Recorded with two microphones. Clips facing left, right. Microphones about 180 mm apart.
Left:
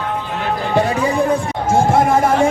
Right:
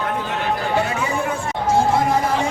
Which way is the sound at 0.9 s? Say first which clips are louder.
Left 7 dB; 35° left (ahead or behind).